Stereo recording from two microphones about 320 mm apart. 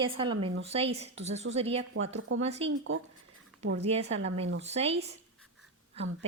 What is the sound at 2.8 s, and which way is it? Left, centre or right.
Speech, right.